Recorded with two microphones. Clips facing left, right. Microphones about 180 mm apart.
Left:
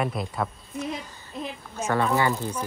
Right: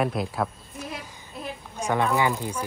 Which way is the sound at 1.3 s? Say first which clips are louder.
Left 2 dB; 5° right (ahead or behind).